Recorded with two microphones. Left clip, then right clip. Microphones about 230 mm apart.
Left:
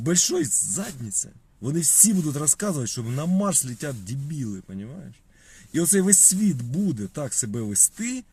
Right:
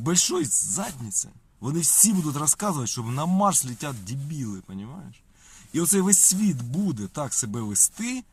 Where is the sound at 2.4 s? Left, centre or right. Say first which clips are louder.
Even; centre.